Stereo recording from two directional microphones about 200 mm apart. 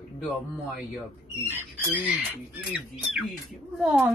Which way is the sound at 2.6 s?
Centre (ahead or behind).